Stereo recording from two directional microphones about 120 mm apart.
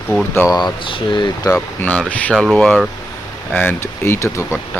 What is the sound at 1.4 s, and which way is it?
Speech, 20° left (ahead or behind).